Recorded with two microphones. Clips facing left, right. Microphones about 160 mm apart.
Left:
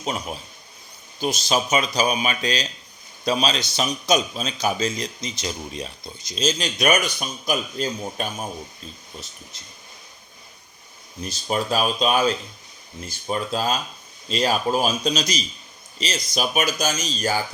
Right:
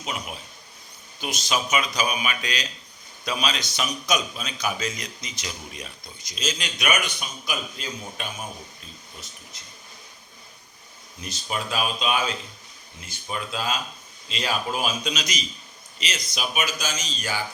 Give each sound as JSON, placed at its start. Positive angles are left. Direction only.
{"t": 0.0, "sound": "a man's voice", "side_deg": 35}
{"t": 11.4, "sound": "speech", "side_deg": 40}